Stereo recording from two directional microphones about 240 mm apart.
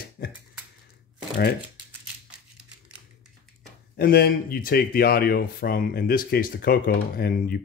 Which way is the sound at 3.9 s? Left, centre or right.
Left.